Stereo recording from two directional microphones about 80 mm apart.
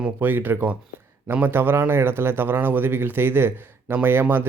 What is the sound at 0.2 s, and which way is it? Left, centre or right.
A man's voice, right.